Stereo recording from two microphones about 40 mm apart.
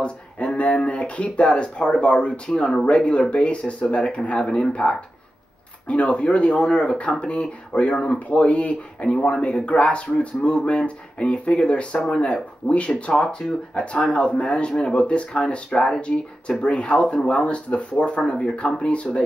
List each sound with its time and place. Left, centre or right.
0.6 s speech: left
13.1 s speech: centre